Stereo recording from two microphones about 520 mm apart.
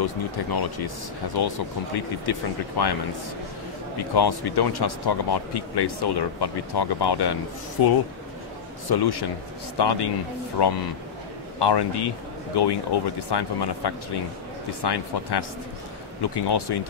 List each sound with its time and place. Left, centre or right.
0.0 s speech: left
4.1 s speech: left
8.8 s speech: left